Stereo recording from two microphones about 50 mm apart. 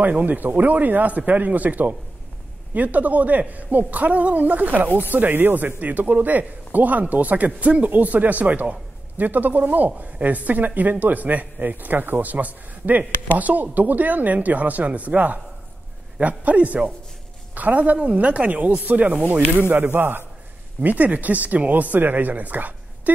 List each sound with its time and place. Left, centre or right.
0.0 s a woman's voice: right
19.7 s a man's voice: right
20.8 s speech: right